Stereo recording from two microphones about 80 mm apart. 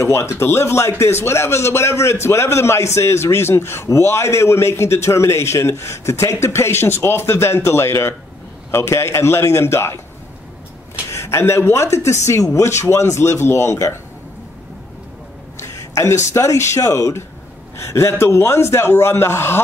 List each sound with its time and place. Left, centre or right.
0.0 s a man's voice: left
11.1 s a man's voice: left
15.6 s a man's voice: left